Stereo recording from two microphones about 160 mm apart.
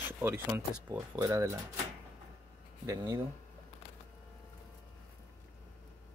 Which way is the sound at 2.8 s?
20° right (ahead or behind).